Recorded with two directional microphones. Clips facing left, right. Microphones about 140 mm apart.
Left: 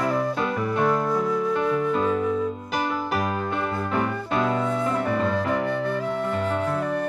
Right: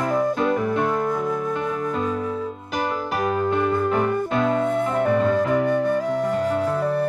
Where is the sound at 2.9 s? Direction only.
Centre (ahead or behind).